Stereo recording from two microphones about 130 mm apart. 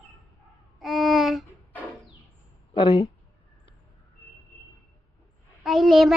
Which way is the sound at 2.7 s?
40° left (ahead or behind).